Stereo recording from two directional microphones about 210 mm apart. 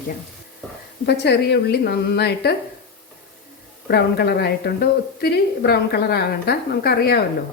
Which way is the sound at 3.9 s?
50° left (ahead or behind).